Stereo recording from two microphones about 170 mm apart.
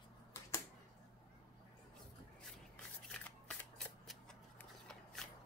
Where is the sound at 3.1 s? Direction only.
5° left (ahead or behind).